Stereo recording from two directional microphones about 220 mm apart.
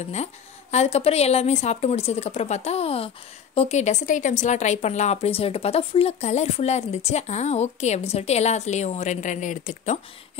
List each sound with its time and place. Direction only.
0.1 s a woman's voice: 30° left (ahead or behind)